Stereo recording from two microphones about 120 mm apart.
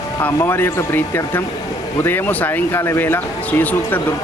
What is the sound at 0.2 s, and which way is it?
Speech, 15° left (ahead or behind).